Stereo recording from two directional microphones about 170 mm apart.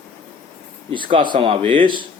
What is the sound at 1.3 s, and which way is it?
Speech, 30° right (ahead or behind).